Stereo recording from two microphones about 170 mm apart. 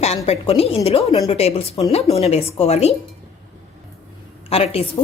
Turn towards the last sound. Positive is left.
turn(degrees=35)  # may be behind; listen again after turning